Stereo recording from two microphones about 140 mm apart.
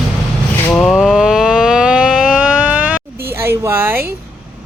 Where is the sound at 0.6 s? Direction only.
10° left (ahead or behind); by 3.0 s 10° right (ahead or behind).